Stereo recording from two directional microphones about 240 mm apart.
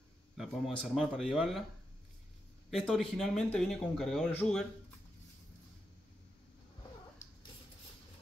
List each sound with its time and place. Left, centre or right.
0.4 s speech: centre
2.7 s speech: centre